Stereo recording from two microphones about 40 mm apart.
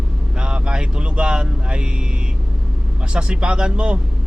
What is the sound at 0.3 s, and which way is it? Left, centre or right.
Speech, right.